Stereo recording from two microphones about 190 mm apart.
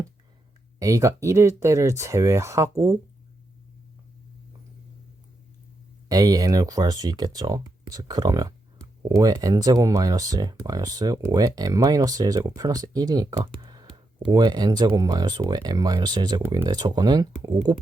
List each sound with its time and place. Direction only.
0.8 s speech: 15° right (ahead or behind)
6.1 s speech: 20° right (ahead or behind)